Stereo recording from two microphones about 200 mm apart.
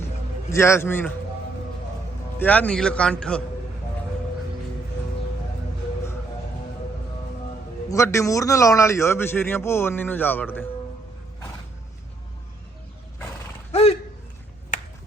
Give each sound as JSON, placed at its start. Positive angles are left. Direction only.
{"t": 0.5, "sound": "a man's voice", "side_deg": 15}
{"t": 2.4, "sound": "a man's voice", "side_deg": 5}
{"t": 7.9, "sound": "a man's voice", "side_deg": 15}
{"t": 13.7, "sound": "a sound", "side_deg": 30}